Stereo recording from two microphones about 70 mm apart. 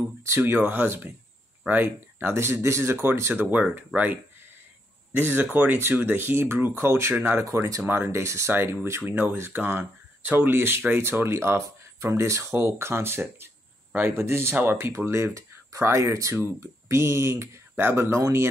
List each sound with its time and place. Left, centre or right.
0.4 s speech: right